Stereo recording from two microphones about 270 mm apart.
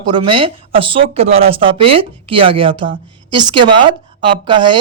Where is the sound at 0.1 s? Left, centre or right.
Centre.